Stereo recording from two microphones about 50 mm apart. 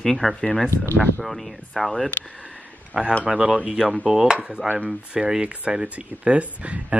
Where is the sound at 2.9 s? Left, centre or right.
Right.